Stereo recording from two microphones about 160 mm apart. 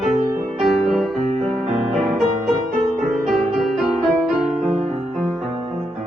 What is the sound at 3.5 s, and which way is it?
Music, centre (ahead or behind).